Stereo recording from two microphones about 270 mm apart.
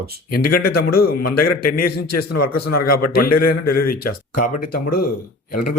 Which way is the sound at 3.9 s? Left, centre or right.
Left.